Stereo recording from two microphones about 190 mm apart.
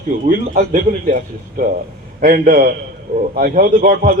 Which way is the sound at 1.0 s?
45° right (ahead or behind).